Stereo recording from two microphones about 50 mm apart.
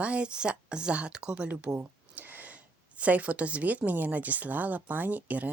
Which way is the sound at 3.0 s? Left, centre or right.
Right.